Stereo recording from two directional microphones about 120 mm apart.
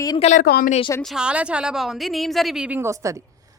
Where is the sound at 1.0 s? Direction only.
5° right (ahead or behind).